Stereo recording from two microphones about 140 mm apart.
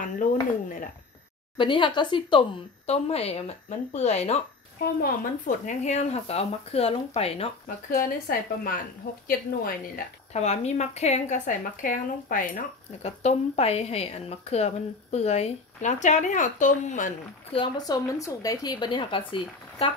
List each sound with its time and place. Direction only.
0.2 s speech: 70° left (ahead or behind)
1.6 s speech: 35° left (ahead or behind)
2.9 s a woman's voice: 45° left (ahead or behind)
5.0 s speech: 85° left
5.9 s a woman's voice: 50° left (ahead or behind)
7.6 s speech: 90° left
10.3 s a woman's voice: 50° left (ahead or behind); by 12.6 s 70° left (ahead or behind)
13.0 s a woman's voice: 50° left (ahead or behind)
17.5 s speech: 35° left (ahead or behind)